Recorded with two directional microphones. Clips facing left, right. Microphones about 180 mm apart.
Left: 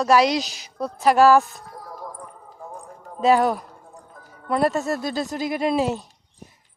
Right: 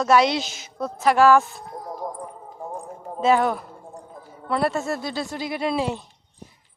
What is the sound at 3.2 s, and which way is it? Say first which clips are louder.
Speech: left 2 dB; 40° left (ahead or behind).